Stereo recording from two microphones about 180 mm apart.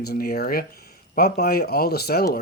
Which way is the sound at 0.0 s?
60° left (ahead or behind).